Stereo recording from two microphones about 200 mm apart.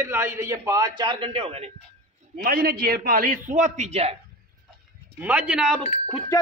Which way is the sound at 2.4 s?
50° right (ahead or behind).